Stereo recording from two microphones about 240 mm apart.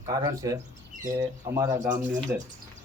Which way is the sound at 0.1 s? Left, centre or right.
Centre.